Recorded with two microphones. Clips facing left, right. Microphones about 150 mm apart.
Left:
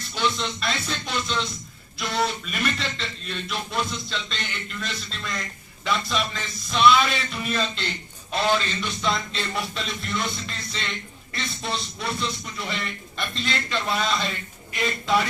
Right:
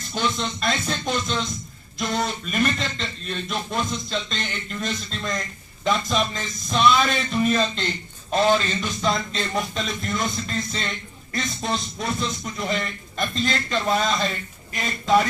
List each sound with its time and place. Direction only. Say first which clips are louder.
0.0 s a man's voice: right 1 dB; 45° right (ahead or behind)